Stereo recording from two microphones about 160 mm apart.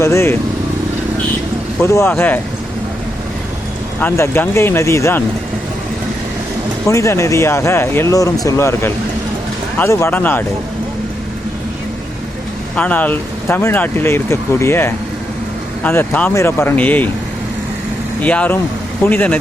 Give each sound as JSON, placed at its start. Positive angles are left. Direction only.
{"t": 0.0, "sound": "speech", "side_deg": 15}
{"t": 1.8, "sound": "speech", "side_deg": 15}
{"t": 4.0, "sound": "speech", "side_deg": 15}
{"t": 6.8, "sound": "speech", "side_deg": 20}
{"t": 12.7, "sound": "speech", "side_deg": 10}
{"t": 18.2, "sound": "speech", "side_deg": 10}